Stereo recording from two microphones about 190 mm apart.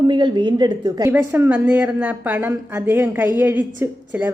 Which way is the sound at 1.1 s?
10° right (ahead or behind).